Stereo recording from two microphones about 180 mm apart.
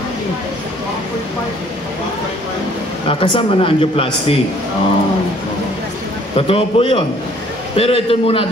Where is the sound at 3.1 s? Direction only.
30° left (ahead or behind).